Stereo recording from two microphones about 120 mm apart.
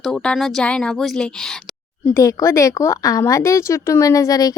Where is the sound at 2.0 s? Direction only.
25° left (ahead or behind).